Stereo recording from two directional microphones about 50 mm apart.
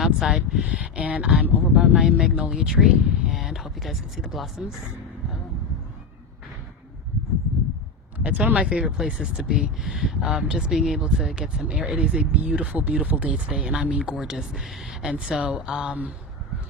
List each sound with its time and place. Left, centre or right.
0.0 s a sound: centre
0.6 s speech: right; by 4.6 s centre
8.2 s speech: right
8.5 s speech: right
13.5 s speech: centre
15.1 s speech: centre